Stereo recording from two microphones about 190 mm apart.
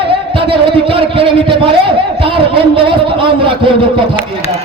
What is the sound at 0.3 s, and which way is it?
A man's voice, 30° right (ahead or behind).